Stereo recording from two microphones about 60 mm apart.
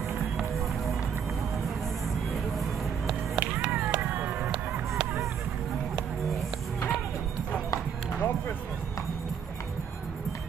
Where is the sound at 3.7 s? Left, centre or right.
Right.